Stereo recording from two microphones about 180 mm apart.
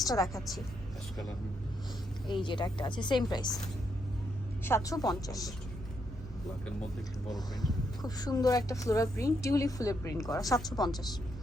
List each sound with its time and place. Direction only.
0.0 s a woman's voice: 20° left (ahead or behind)
2.2 s a woman's voice: 25° left (ahead or behind)
4.6 s a woman's voice: 15° left (ahead or behind)
8.0 s a woman's voice: 20° left (ahead or behind)